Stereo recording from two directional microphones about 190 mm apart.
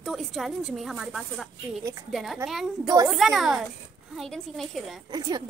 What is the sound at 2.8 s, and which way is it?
Speech, 15° right (ahead or behind).